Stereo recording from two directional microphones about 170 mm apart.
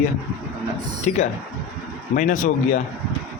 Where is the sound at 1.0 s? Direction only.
45° left (ahead or behind).